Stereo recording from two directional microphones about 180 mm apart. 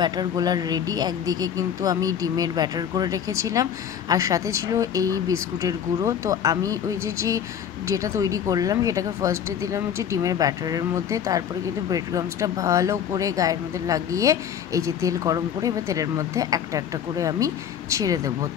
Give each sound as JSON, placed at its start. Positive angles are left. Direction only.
{"t": 0.0, "sound": "speech", "side_deg": -20}